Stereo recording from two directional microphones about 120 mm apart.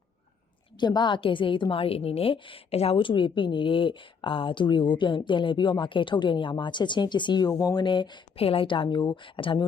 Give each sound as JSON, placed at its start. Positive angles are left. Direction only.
{"t": 0.8, "sound": "a woman's voice", "side_deg": 40}
{"t": 8.4, "sound": "a woman's voice", "side_deg": 50}